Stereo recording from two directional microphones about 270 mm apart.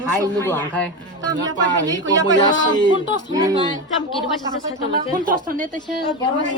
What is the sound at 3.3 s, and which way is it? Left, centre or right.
Speech, centre.